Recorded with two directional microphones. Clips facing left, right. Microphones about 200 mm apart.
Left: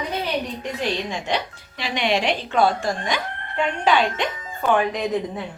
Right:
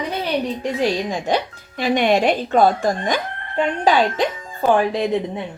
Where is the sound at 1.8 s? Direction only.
50° right (ahead or behind); by 5.2 s 30° right (ahead or behind).